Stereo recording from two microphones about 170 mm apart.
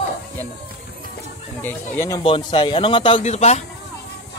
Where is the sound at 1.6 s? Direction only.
15° left (ahead or behind).